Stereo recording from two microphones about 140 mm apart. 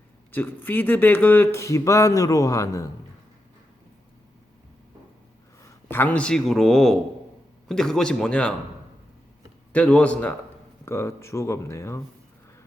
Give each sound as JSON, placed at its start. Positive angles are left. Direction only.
{"t": 0.3, "sound": "speech", "side_deg": 15}
{"t": 5.6, "sound": "speech", "side_deg": 15}
{"t": 9.7, "sound": "a man's voice", "side_deg": 10}